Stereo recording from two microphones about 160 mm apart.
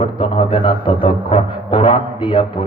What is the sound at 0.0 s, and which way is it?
A man's voice, 35° left (ahead or behind).